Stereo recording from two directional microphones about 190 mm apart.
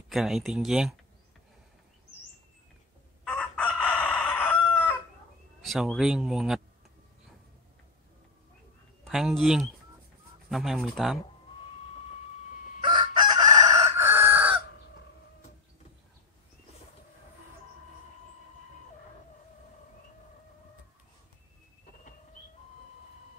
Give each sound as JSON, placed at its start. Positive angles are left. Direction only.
{"t": 0.1, "sound": "speech", "side_deg": 0}
{"t": 3.3, "sound": "chicken", "side_deg": 5}
{"t": 5.6, "sound": "speech", "side_deg": 0}
{"t": 9.0, "sound": "speech", "side_deg": 0}
{"t": 12.8, "sound": "chicken", "side_deg": -25}
{"t": 13.8, "sound": "crowing", "side_deg": -15}